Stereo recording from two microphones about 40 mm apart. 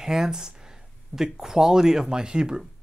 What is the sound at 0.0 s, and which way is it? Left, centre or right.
Speech, centre.